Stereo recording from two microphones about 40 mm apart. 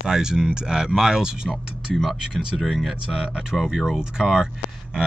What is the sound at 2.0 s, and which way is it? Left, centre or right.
Speech, centre.